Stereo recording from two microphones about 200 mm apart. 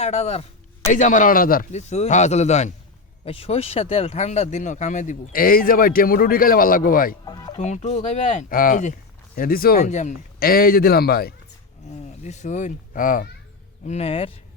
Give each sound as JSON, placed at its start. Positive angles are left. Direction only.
{"t": 0.0, "sound": "speech", "side_deg": 35}
{"t": 7.3, "sound": "music", "side_deg": 20}
{"t": 7.6, "sound": "speech", "side_deg": 35}
{"t": 12.2, "sound": "speech", "side_deg": 35}
{"t": 13.8, "sound": "speech", "side_deg": 30}